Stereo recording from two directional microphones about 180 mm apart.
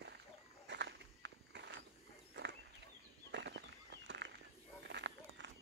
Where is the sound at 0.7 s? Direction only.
80° right.